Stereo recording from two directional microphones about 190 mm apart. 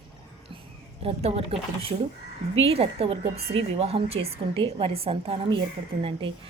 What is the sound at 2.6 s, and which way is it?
Speech, 30° right (ahead or behind).